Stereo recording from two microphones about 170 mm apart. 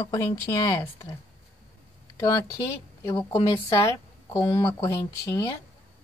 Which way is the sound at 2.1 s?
20° left (ahead or behind).